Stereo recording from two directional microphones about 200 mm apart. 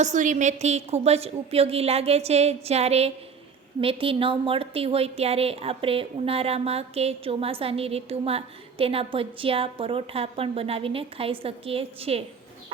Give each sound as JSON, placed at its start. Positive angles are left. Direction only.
{"t": 0.0, "sound": "a woman's voice", "side_deg": -40}